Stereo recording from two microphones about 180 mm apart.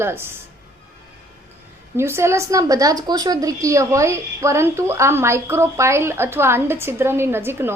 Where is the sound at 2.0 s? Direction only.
15° right (ahead or behind).